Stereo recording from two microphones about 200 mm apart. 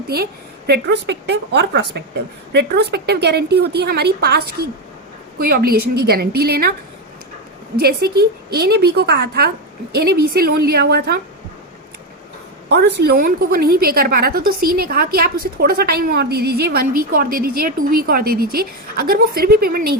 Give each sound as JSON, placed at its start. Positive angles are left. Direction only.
{"t": 0.7, "sound": "a woman's voice", "side_deg": -55}
{"t": 7.8, "sound": "a woman's voice", "side_deg": -50}
{"t": 12.6, "sound": "a woman's voice", "side_deg": -55}